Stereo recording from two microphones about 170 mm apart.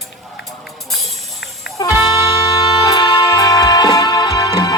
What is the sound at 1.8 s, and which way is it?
Music, 25° left (ahead or behind).